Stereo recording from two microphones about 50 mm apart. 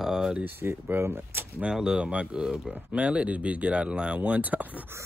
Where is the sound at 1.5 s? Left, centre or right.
Centre.